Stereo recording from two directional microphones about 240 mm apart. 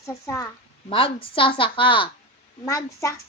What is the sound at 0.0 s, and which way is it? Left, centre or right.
A child's voice, centre.